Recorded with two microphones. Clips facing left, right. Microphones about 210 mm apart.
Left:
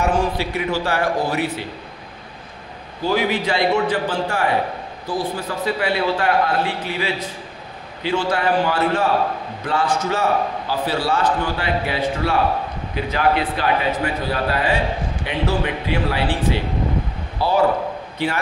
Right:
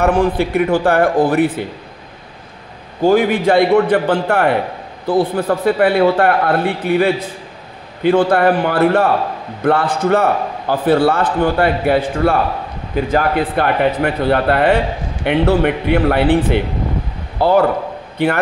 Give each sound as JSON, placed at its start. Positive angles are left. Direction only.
{"t": 0.0, "sound": "a man's voice", "side_deg": -60}
{"t": 3.0, "sound": "a man's voice", "side_deg": -50}